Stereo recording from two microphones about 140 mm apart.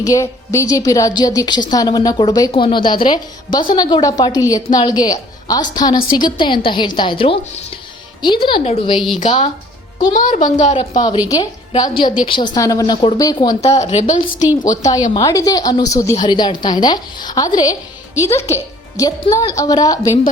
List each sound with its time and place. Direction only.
0.0 s a woman's voice: 20° left (ahead or behind)
2.5 s a woman's voice: 40° left (ahead or behind)
10.1 s a woman's voice: 65° left (ahead or behind)
10.9 s a woman's voice: 30° left (ahead or behind)
12.5 s a woman's voice: 25° left (ahead or behind)
13.7 s a woman's voice: 50° left (ahead or behind)
14.6 s a woman's voice: 65° left (ahead or behind)
15.1 s a woman's voice: 25° left (ahead or behind)